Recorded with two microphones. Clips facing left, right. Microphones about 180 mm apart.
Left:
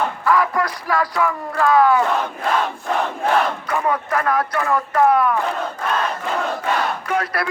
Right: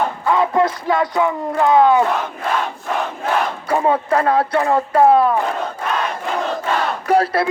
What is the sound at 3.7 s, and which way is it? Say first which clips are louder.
Speech: right 4 dB; 30° right (ahead or behind).